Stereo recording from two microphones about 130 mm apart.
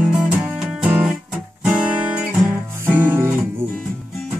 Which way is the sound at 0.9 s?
10° right (ahead or behind).